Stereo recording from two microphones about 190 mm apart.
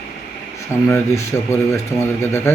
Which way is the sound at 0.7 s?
15° left (ahead or behind).